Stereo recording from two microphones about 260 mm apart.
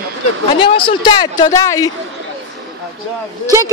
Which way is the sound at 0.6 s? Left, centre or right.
Centre.